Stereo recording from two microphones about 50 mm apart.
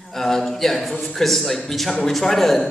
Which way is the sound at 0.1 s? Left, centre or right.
Centre.